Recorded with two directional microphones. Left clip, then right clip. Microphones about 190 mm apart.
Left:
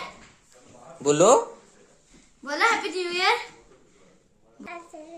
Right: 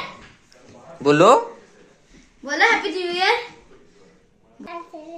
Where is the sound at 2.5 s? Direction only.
80° left.